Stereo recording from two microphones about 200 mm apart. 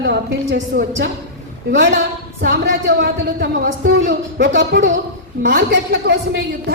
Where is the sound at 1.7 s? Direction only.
65° right (ahead or behind).